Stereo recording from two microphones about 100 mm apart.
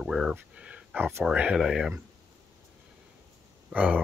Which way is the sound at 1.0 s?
25° right (ahead or behind).